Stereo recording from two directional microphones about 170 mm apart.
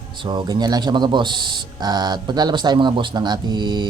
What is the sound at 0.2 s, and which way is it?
Speech, 25° right (ahead or behind).